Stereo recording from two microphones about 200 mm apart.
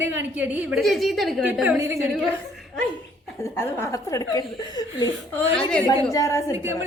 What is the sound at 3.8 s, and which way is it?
A woman's voice, 15° left (ahead or behind).